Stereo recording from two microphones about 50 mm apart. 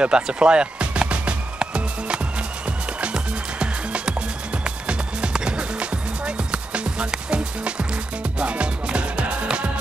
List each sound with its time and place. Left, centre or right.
0.0 s music: right